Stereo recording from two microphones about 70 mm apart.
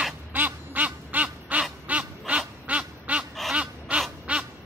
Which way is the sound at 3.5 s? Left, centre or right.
Centre.